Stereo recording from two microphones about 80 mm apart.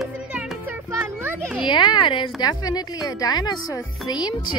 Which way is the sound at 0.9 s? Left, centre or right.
Right.